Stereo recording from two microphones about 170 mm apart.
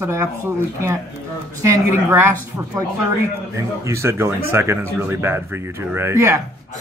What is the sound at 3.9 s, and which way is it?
A man's voice, 15° right (ahead or behind).